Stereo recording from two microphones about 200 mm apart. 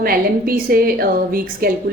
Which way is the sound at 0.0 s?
45° right (ahead or behind).